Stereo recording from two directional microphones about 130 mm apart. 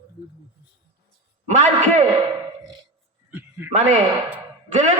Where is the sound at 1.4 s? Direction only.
60° right (ahead or behind).